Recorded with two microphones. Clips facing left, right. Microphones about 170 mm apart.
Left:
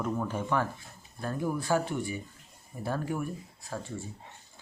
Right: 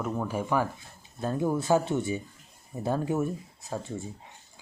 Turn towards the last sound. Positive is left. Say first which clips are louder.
# right 3 dB
turn(degrees=-20)  # may be behind; listen again after turning